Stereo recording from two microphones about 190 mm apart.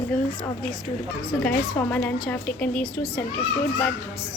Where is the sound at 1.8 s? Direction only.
10° left (ahead or behind).